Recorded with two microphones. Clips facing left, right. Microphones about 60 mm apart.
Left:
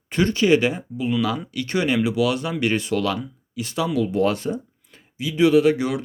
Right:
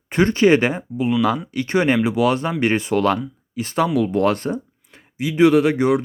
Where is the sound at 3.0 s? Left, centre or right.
Right.